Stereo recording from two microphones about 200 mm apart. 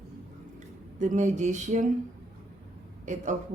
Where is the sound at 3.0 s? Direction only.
35° right (ahead or behind).